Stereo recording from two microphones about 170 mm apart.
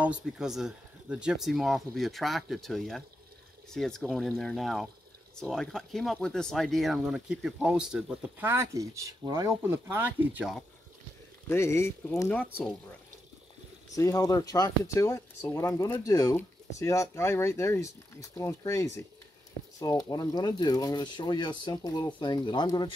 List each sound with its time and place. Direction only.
0.0 s speech: 5° right (ahead or behind)
11.4 s speech: 15° left (ahead or behind)
13.9 s speech: 20° left (ahead or behind)
20.1 s speech: 25° left (ahead or behind)